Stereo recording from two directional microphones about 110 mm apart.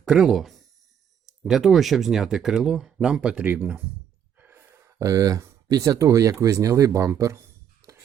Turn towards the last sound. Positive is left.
turn(degrees=-30)  # may be behind; listen again after turning